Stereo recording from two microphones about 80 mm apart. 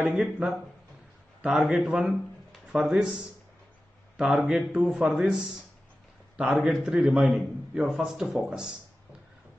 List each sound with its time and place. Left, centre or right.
0.0 s a man's voice: centre